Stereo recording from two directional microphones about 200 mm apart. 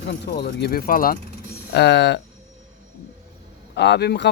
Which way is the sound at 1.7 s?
60° left (ahead or behind).